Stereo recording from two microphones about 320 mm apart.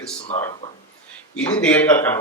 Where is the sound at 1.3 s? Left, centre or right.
Centre.